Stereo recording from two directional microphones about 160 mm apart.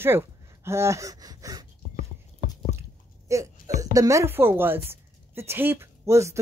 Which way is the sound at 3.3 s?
20° right (ahead or behind).